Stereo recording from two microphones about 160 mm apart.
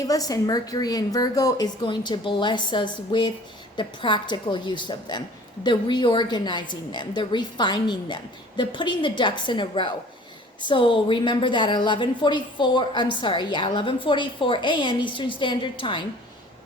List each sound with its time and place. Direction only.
0.0 s a woman's voice: 20° left (ahead or behind)